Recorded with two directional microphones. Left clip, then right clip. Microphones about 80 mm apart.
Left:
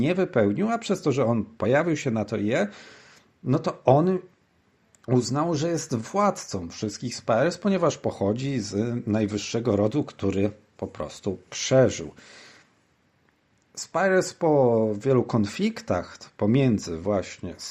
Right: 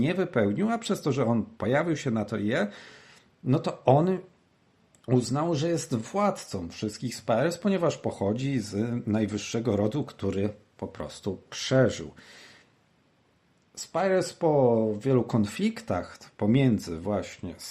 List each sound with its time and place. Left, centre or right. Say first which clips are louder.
0.0 s speech: left 4 dB; left
10.9 s speech: left 4 dB; left
13.7 s speech: left 3 dB; left